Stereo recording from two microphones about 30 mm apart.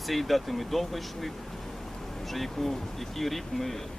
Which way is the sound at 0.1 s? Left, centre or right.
Centre.